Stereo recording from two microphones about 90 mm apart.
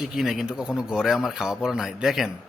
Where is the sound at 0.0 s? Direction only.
5° right (ahead or behind).